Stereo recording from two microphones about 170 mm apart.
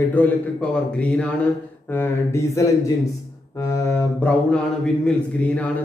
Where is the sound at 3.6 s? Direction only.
15° left (ahead or behind).